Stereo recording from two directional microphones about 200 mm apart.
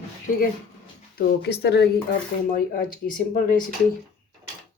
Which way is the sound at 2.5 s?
45° left (ahead or behind).